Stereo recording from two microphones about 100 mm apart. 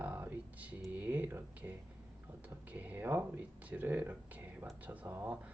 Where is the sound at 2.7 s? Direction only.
15° right (ahead or behind).